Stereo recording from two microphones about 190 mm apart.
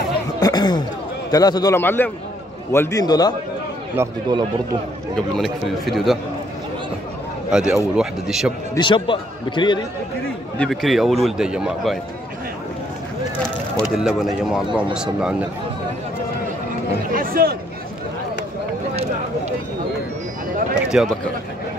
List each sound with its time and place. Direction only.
0.4 s a sound: 20° left (ahead or behind)
1.3 s a man's voice: 20° left (ahead or behind)
3.9 s speech: 20° right (ahead or behind)
5.1 s a man's voice: centre (ahead or behind)
7.5 s a man's voice: 5° right (ahead or behind)
8.7 s speech: 25° left (ahead or behind)
10.6 s a man's voice: centre (ahead or behind)
13.9 s a man's voice: centre (ahead or behind)
17.1 s speech: 50° right (ahead or behind)
20.8 s speech: 5° right (ahead or behind)